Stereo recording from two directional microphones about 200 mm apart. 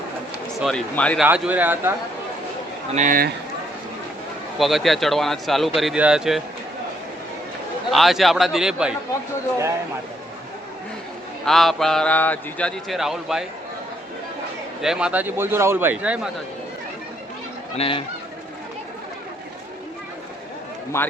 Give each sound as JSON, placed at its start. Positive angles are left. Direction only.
{"t": 0.6, "sound": "a man's voice", "side_deg": 5}
{"t": 1.2, "sound": "a man's voice", "side_deg": -10}
{"t": 2.9, "sound": "a man's voice", "side_deg": -40}
{"t": 4.5, "sound": "a man's voice", "side_deg": 0}
{"t": 7.9, "sound": "a man's voice", "side_deg": 0}
{"t": 11.4, "sound": "a man's voice", "side_deg": 0}
{"t": 14.8, "sound": "a man's voice", "side_deg": -5}
{"t": 17.7, "sound": "speech", "side_deg": 25}
{"t": 20.9, "sound": "a man's voice", "side_deg": 15}